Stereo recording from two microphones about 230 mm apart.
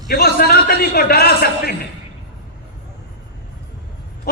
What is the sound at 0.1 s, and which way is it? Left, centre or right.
A man's voice, left.